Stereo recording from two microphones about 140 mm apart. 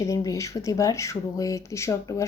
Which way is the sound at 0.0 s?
20° left (ahead or behind).